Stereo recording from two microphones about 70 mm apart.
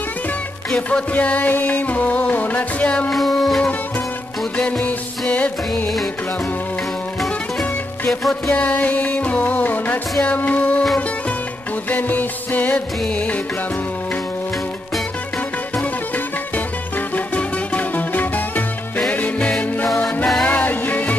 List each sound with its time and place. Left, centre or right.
0.7 s music: centre
3.1 s music: centre
4.6 s music: centre
8.1 s music: centre
8.5 s music: left
11.9 s music: left
17.1 s music: left